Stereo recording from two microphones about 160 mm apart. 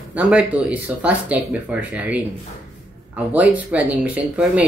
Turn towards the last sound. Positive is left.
turn(degrees=-10)  # may be behind; listen again after turning